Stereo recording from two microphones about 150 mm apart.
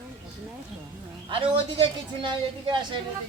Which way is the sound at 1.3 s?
35° right (ahead or behind).